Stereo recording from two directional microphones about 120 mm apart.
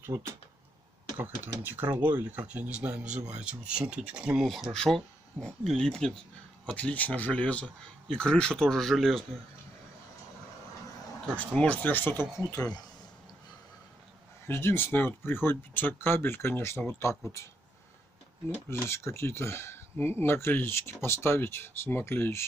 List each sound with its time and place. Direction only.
0.0 s speech: 20° right (ahead or behind); by 9.2 s centre (ahead or behind)
11.3 s speech: 10° left (ahead or behind); by 12.7 s 30° left (ahead or behind)
14.5 s speech: 20° left (ahead or behind)
18.7 s speech: 20° left (ahead or behind)